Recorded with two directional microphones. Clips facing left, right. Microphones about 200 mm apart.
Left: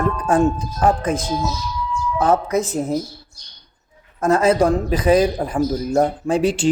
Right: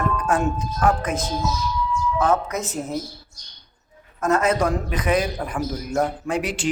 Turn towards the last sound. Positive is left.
turn(degrees=30)  # may be behind; listen again after turning